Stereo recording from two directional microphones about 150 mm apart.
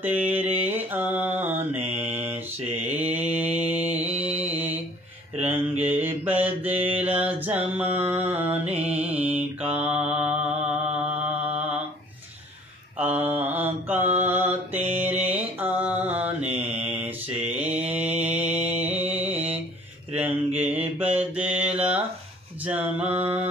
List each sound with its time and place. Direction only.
0.0 s mantra: 10° right (ahead or behind)
3.5 s music: 10° right (ahead or behind)
4.2 s mantra: 10° right (ahead or behind)
13.0 s mantra: 10° right (ahead or behind)
14.8 s music: 45° right (ahead or behind)
15.3 s mantra: 10° right (ahead or behind)
17.9 s music: 10° right (ahead or behind)
20.2 s mantra: 15° right (ahead or behind)